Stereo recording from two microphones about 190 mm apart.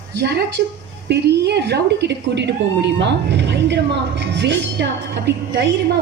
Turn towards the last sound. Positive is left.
turn(degrees=-65)  # may be behind; listen again after turning